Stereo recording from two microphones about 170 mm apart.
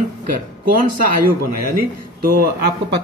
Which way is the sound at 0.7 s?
55° right (ahead or behind).